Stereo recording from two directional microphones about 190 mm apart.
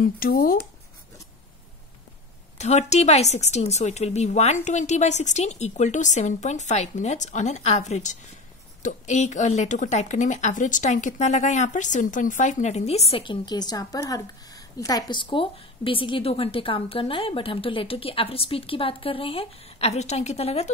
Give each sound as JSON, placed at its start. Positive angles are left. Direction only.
{"t": 0.0, "sound": "speech", "side_deg": 50}
{"t": 2.6, "sound": "speech", "side_deg": 35}